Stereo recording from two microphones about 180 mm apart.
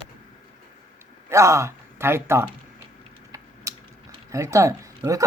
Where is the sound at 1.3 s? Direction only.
15° right (ahead or behind).